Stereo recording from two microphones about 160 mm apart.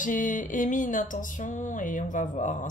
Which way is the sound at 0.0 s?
55° left (ahead or behind).